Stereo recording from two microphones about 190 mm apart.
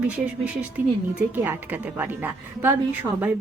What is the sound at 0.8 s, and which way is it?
A woman's voice, 10° right (ahead or behind).